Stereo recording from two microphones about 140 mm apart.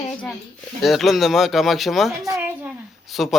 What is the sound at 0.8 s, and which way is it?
Speech, centre (ahead or behind).